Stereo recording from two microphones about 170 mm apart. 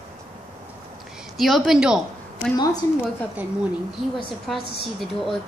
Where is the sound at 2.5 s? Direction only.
25° left (ahead or behind).